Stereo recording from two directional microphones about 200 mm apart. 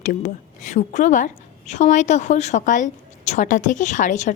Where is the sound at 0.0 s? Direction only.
40° left (ahead or behind).